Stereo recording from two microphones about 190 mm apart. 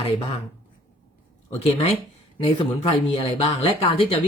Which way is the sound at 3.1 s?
30° left (ahead or behind).